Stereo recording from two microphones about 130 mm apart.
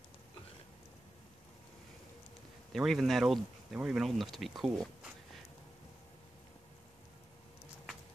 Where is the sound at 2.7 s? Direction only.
Centre (ahead or behind).